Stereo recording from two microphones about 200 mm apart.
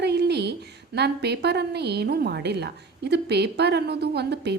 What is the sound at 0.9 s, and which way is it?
A woman's voice, 55° right (ahead or behind).